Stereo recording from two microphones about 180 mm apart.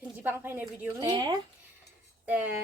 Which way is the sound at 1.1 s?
25° right (ahead or behind).